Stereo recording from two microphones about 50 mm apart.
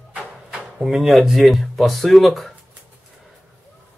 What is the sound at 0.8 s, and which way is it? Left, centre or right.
Speech, centre.